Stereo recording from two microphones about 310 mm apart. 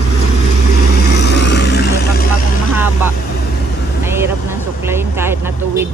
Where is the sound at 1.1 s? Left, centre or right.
Left.